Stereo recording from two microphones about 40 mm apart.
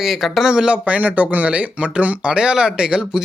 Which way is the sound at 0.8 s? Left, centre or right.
Right.